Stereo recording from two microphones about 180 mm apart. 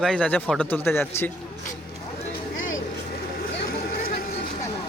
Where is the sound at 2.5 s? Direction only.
90° left.